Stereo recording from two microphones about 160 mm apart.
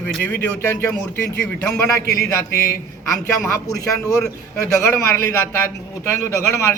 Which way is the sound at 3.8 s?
20° left (ahead or behind).